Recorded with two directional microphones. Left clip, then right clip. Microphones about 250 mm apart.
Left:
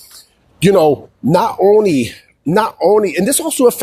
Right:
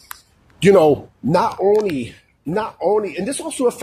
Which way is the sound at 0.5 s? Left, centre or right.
Left.